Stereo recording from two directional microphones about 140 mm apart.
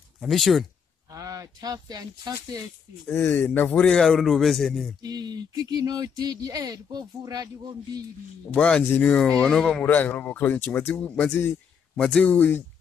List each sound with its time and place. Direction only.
0.2 s a man's voice: centre (ahead or behind)
1.1 s speech: 25° right (ahead or behind)
3.1 s a man's voice: 15° left (ahead or behind)
5.0 s speech: 30° right (ahead or behind)
8.5 s speech: 5° left (ahead or behind)